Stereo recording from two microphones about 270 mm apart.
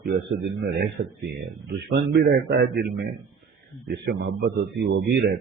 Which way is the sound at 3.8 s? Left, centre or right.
Right.